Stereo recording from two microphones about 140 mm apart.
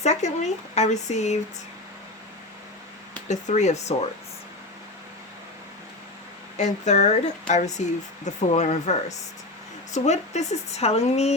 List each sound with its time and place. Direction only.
0.0 s a sound: 55° left (ahead or behind)
0.8 s speech: 55° left (ahead or behind)
3.2 s speech: 55° left (ahead or behind)
6.6 s speech: 55° left (ahead or behind)